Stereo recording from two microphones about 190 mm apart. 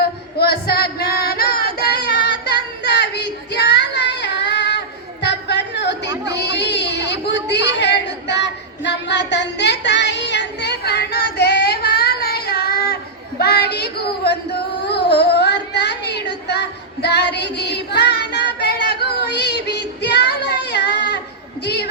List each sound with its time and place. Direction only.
0.0 s female singing: 55° left (ahead or behind)
3.5 s child singing: 65° left (ahead or behind)
5.2 s a sound: 65° left (ahead or behind)
13.4 s child singing: 55° left (ahead or behind)
18.7 s female singing: 60° left (ahead or behind)
21.6 s a sound: 60° left (ahead or behind)